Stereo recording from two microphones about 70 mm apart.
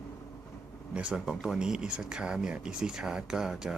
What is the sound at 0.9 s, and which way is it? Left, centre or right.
Speech, centre.